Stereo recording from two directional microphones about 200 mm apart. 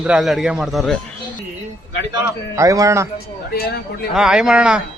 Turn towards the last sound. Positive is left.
turn(degrees=-5)  # may be behind; listen again after turning